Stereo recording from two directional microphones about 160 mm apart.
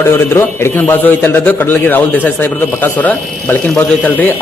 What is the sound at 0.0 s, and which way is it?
A man's voice, 15° left (ahead or behind).